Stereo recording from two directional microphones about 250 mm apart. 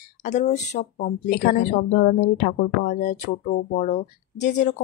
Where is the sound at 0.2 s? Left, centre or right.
Left.